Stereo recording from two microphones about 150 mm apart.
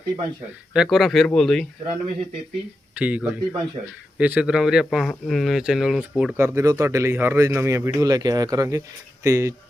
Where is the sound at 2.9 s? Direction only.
10° right (ahead or behind).